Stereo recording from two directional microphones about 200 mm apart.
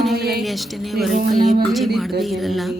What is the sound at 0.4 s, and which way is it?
Speech, centre (ahead or behind).